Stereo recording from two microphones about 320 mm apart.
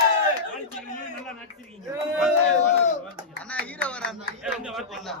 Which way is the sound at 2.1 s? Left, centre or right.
Centre.